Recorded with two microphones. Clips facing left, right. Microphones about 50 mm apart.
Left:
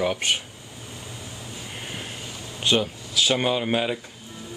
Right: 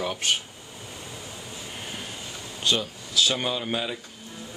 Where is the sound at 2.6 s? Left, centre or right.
Left.